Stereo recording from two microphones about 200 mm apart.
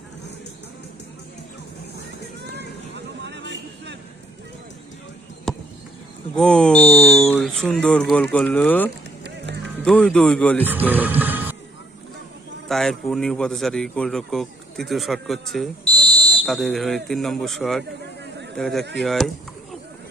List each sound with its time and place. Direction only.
2.4 s vehicle: 55° right (ahead or behind)
5.5 s a sound: centre (ahead or behind)
6.3 s a man's voice: 5° left (ahead or behind)
7.0 s speech: 30° left (ahead or behind)
7.3 s a man's voice: centre (ahead or behind)
10.7 s music: 10° right (ahead or behind)
12.6 s a man's voice: centre (ahead or behind)